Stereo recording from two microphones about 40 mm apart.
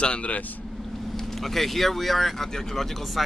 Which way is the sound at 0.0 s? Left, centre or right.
Left.